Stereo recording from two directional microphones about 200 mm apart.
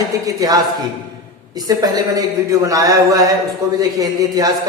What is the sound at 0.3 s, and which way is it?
Speech, 20° right (ahead or behind).